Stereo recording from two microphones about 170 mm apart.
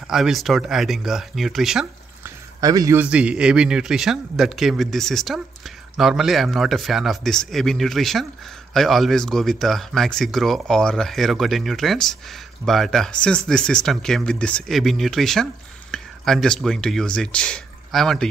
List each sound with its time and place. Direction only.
0.1 s speech: centre (ahead or behind)
2.2 s a sound: 20° right (ahead or behind)
3.0 s speech: 5° right (ahead or behind)